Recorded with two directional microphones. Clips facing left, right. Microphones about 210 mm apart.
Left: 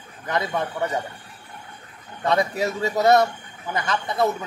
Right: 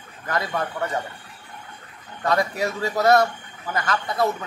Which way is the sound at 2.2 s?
25° left (ahead or behind).